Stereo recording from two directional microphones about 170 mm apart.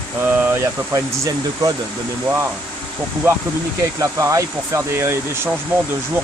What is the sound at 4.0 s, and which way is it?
Speech, 20° right (ahead or behind).